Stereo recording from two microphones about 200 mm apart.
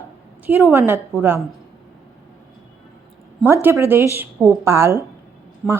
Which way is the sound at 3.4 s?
10° right (ahead or behind).